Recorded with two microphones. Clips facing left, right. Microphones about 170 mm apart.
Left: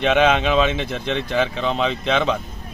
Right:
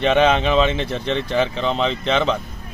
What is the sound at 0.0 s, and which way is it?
Speech, 10° left (ahead or behind).